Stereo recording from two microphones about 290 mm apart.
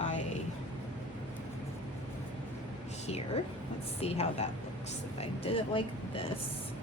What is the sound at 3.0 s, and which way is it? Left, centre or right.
A woman's voice, left.